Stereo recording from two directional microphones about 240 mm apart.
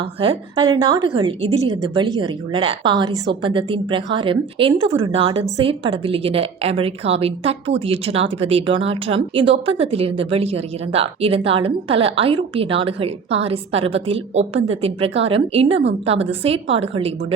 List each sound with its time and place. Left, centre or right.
0.0 s a woman's voice: right